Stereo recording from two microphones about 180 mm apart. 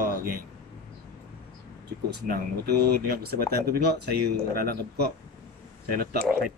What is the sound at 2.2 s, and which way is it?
Speech, 60° right (ahead or behind).